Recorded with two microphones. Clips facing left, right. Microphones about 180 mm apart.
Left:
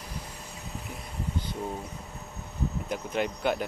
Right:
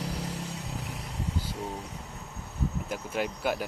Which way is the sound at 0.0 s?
80° right.